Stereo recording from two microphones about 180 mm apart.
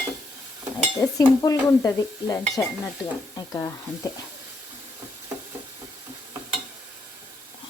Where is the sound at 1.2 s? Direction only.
20° left (ahead or behind).